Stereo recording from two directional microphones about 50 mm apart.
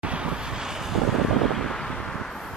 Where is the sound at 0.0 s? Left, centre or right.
Right.